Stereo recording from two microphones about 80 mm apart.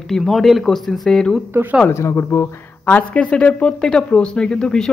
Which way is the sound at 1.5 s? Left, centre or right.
Right.